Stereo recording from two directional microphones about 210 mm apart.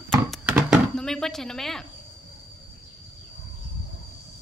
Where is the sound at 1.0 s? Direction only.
Centre (ahead or behind).